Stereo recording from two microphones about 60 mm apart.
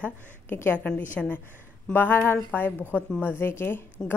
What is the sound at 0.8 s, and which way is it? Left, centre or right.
Speech, left.